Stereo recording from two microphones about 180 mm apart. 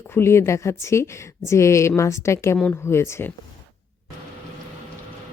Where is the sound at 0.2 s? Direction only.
15° left (ahead or behind).